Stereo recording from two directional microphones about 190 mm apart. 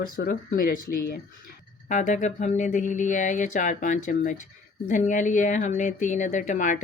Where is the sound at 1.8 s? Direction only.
40° left (ahead or behind).